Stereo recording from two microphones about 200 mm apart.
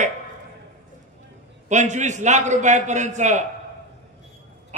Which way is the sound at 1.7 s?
35° right (ahead or behind).